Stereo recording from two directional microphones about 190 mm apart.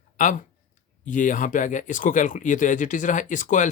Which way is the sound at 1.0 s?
40° left (ahead or behind).